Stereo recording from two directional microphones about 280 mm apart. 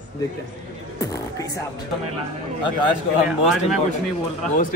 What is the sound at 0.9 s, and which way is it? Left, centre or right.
Music, centre.